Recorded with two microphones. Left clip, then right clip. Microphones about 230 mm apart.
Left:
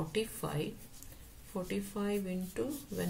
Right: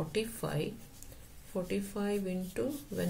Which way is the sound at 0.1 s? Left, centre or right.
Centre.